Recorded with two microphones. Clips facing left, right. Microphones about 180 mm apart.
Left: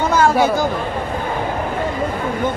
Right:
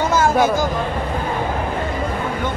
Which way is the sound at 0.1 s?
60° left (ahead or behind).